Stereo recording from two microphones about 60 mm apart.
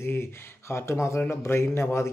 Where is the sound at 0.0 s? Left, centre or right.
Left.